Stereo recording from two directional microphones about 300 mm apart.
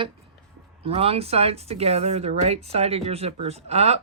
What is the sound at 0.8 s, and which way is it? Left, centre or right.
Speech, centre.